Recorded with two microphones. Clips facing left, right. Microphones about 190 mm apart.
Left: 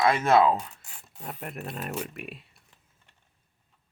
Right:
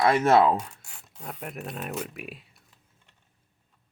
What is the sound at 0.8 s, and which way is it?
Speech, 5° left (ahead or behind).